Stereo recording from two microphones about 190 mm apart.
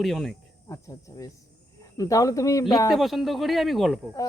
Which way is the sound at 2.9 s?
Centre (ahead or behind).